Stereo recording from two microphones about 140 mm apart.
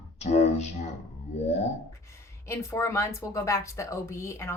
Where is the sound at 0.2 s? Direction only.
55° left (ahead or behind).